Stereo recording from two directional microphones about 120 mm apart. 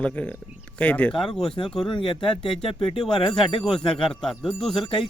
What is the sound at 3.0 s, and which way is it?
Speech, 5° left (ahead or behind).